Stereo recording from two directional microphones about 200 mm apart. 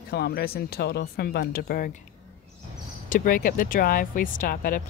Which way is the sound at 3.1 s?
45° left (ahead or behind).